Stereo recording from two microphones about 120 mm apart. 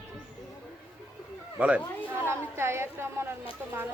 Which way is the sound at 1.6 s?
10° right (ahead or behind).